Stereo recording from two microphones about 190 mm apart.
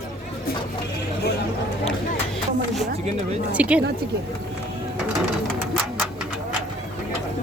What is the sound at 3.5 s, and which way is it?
Speech, 5° right (ahead or behind).